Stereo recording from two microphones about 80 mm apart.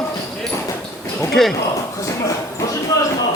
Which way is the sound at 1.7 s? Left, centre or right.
Left.